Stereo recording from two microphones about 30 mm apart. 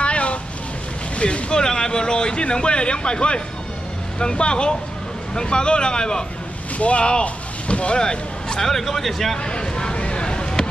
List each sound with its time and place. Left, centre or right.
0.0 s vehicle: left
1.1 s boat: left
1.5 s a man's voice: left
6.8 s speech: left
8.0 s speech: left
8.6 s a man's voice: centre
9.4 s a sound: left